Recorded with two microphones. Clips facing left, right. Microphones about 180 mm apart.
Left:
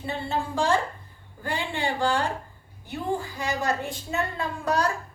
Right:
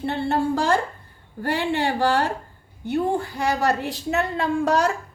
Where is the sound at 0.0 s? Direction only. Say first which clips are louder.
Right 7 dB; 65° right (ahead or behind).